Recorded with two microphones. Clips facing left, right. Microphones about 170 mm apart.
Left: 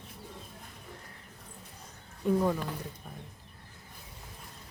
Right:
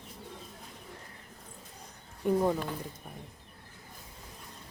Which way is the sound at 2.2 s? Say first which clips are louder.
Even; 15° right (ahead or behind).